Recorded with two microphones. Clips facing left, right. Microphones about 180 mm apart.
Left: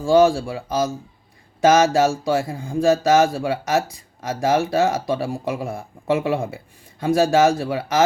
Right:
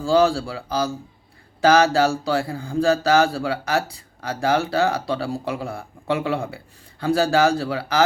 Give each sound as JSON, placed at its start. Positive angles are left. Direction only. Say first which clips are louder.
{"t": 0.0, "sound": "speech", "louder": "left 3 dB", "side_deg": 20}